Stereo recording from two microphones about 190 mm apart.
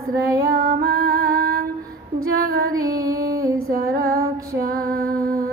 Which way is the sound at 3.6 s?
50° right (ahead or behind).